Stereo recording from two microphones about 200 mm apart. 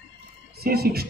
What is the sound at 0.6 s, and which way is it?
Speech, 50° right (ahead or behind).